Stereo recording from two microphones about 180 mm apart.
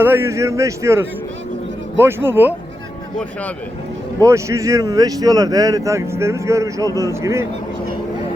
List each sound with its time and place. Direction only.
0.0 s speech: 15° right (ahead or behind)
4.2 s speech: 15° right (ahead or behind)